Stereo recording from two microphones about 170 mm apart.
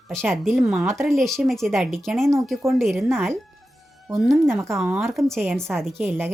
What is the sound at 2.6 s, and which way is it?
Speech, 15° right (ahead or behind).